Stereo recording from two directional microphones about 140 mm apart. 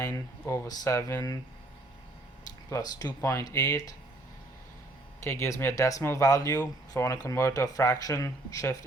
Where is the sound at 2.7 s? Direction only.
30° left (ahead or behind).